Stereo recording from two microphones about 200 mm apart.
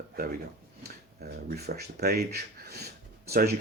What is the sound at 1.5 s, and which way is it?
Speech, 50° right (ahead or behind).